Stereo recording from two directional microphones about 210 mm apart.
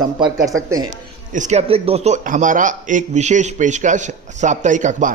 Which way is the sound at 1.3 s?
35° right (ahead or behind).